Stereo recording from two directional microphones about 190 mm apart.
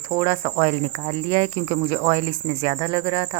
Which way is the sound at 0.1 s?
25° right (ahead or behind).